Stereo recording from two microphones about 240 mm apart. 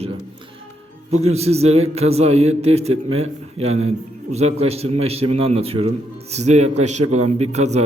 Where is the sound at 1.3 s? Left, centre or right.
Right.